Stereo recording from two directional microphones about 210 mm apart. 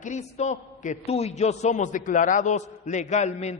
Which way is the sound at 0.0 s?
35° left (ahead or behind).